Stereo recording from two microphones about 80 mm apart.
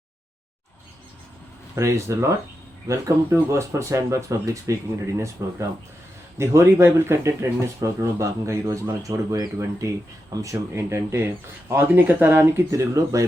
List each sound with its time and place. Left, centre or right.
1.7 s speech: right